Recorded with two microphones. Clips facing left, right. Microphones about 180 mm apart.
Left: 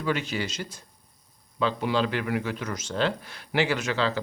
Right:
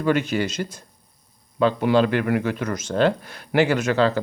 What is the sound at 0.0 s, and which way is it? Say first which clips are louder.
Speech: right 7 dB; 50° right (ahead or behind).